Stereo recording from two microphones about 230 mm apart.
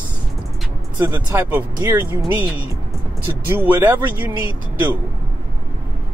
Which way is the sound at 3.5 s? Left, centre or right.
Centre.